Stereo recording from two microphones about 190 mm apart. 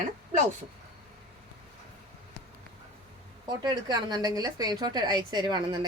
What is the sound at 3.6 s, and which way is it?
A woman's voice, 20° right (ahead or behind).